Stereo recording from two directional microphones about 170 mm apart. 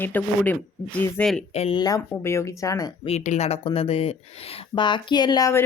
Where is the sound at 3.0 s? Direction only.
40° left (ahead or behind).